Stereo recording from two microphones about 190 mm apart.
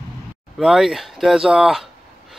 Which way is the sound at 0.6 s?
Centre (ahead or behind).